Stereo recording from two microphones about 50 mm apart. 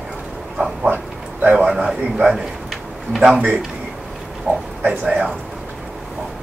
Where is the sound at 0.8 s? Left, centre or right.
Right.